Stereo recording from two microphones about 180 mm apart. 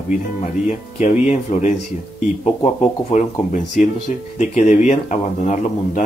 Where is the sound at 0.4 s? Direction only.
40° left (ahead or behind).